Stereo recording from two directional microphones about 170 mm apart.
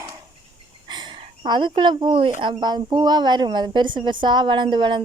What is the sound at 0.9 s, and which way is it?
Speech, 25° right (ahead or behind).